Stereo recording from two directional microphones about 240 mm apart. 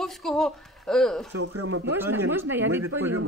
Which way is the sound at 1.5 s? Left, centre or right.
Right.